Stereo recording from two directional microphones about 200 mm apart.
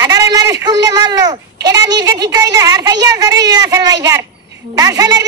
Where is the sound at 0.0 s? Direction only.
20° right (ahead or behind).